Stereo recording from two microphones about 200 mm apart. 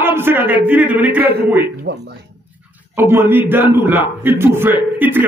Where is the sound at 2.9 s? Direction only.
10° right (ahead or behind).